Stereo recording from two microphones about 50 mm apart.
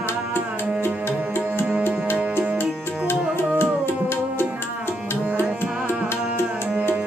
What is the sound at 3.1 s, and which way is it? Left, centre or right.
Music, left.